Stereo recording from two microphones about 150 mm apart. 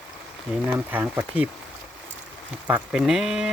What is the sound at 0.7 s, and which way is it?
Speech, 15° right (ahead or behind).